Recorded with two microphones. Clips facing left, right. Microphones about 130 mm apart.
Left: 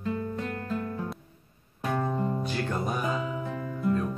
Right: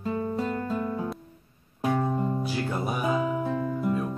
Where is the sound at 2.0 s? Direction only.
15° right (ahead or behind).